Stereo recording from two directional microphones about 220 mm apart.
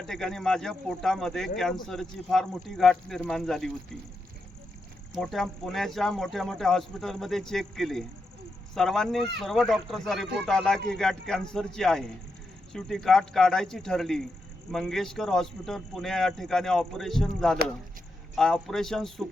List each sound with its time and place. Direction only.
0.1 s speech: centre (ahead or behind)
5.1 s speech: centre (ahead or behind)